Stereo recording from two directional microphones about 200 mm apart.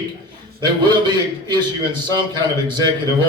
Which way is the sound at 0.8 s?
20° right (ahead or behind).